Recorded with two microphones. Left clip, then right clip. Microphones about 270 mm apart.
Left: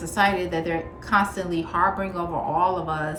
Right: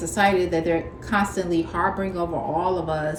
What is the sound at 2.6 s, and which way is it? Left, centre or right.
Speech, left.